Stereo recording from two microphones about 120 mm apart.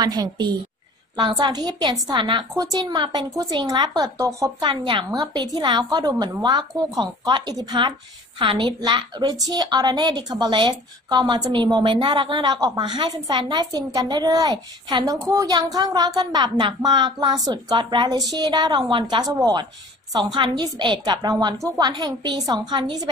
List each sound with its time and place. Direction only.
0.0 s a woman's voice: 35° right (ahead or behind)
2.5 s a woman's voice: 30° right (ahead or behind)
4.6 s speech: 45° right (ahead or behind)
5.1 s a woman's voice: 35° right (ahead or behind)